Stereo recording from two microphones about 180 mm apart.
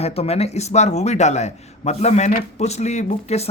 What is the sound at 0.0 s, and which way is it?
A man's voice, 35° left (ahead or behind).